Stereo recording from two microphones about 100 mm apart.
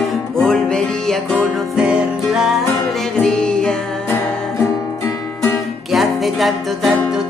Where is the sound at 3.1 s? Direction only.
5° left (ahead or behind).